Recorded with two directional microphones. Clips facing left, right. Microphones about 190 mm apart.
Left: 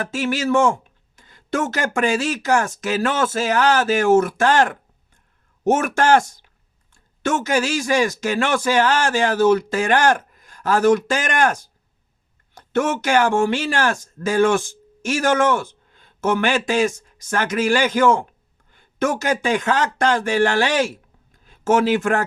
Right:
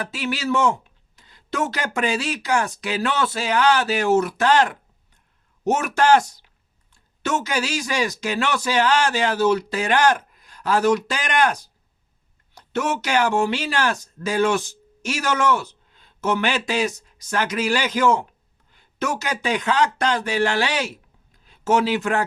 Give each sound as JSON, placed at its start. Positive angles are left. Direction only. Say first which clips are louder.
{"t": 0.0, "sound": "speech", "louder": "left 4 dB", "side_deg": 45}